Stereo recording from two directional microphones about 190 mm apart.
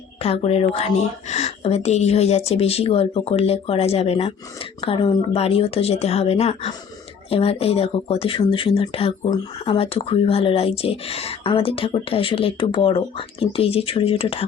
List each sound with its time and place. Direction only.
0.2 s a woman's voice: 30° left (ahead or behind)